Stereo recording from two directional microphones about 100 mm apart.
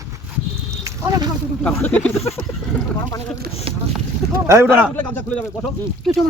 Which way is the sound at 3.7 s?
70° right (ahead or behind).